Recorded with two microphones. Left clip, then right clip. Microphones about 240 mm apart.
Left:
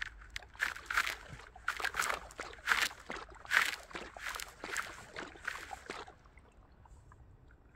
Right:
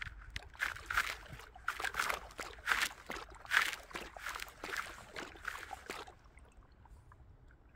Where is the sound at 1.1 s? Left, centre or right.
Right.